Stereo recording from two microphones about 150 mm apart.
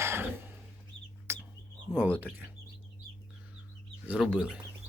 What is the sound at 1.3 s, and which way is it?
Chicken, 15° right (ahead or behind).